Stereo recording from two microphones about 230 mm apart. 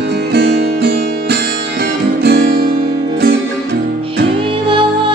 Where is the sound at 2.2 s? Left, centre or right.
Right.